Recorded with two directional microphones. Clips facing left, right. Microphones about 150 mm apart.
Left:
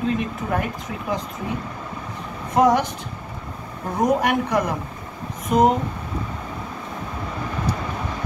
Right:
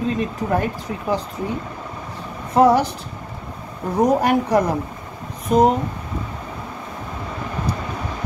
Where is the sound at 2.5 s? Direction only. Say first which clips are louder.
Right 3 dB; 35° right (ahead or behind).